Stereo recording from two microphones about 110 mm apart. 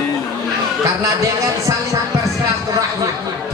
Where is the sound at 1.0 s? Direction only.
30° right (ahead or behind).